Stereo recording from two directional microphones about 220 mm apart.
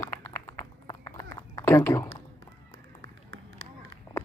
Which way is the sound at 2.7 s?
60° right (ahead or behind).